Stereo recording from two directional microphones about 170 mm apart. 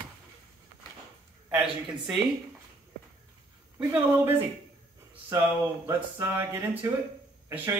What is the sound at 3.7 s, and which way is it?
Speech, 10° right (ahead or behind).